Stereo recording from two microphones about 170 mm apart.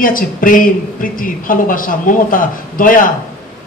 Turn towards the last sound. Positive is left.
turn(degrees=55)  # may be behind; listen again after turning